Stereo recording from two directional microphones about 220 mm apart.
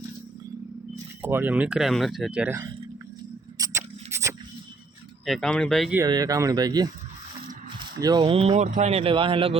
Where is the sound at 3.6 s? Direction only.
10° right (ahead or behind).